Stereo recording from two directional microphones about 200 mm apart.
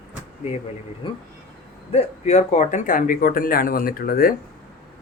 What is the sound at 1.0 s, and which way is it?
Speech, 25° left (ahead or behind).